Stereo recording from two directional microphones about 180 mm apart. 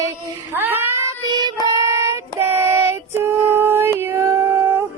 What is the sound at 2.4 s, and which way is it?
Female singing, 15° right (ahead or behind).